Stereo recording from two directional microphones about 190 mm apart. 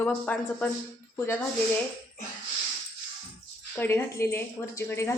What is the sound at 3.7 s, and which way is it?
Speech, 10° left (ahead or behind).